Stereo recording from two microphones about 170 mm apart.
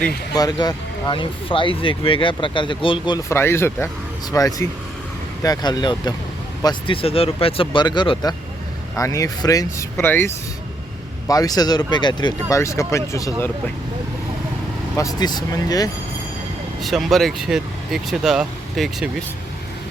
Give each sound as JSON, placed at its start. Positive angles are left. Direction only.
{"t": 0.3, "sound": "speech", "side_deg": 20}
{"t": 3.2, "sound": "speech", "side_deg": 15}
{"t": 14.9, "sound": "speech", "side_deg": 20}
{"t": 16.8, "sound": "speech", "side_deg": 0}